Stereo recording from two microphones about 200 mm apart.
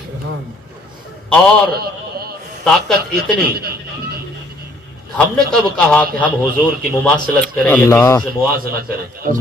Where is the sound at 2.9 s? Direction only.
50° right (ahead or behind).